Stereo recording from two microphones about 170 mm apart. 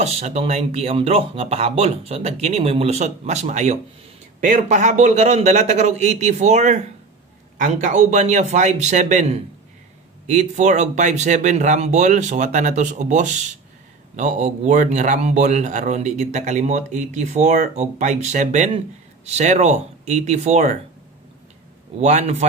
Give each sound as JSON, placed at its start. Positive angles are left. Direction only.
{"t": 0.0, "sound": "a man's voice", "side_deg": -40}
{"t": 22.0, "sound": "a man's voice", "side_deg": -45}